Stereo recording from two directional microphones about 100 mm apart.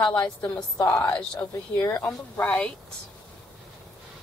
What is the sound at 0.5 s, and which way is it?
Speech, 40° left (ahead or behind).